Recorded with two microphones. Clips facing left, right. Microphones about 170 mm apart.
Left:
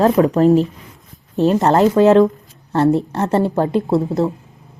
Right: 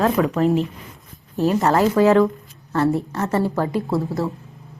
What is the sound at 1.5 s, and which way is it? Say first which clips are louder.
Speech: left 4 dB; 20° left (ahead or behind).